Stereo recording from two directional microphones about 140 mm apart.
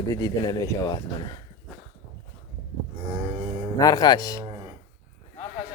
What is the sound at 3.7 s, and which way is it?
Speech, 25° left (ahead or behind).